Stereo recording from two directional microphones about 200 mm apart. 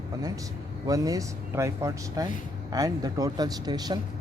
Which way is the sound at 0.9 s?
15° right (ahead or behind).